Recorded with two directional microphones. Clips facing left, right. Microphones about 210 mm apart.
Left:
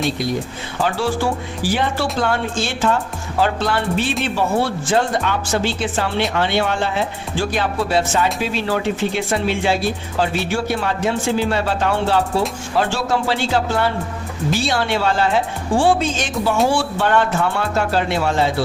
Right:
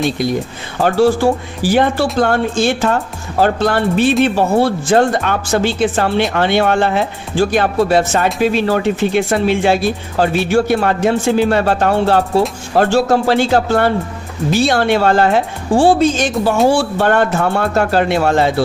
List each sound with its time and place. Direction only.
0.8 s speech: 45° right (ahead or behind)
15.8 s a woman's voice: 40° right (ahead or behind); by 18.5 s 55° right (ahead or behind)